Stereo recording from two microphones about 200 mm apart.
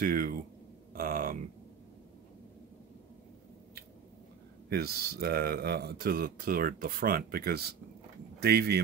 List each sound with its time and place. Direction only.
0.0 s speech: 45° right (ahead or behind)
0.9 s a sound: 45° right (ahead or behind)
4.6 s speech: 50° right (ahead or behind)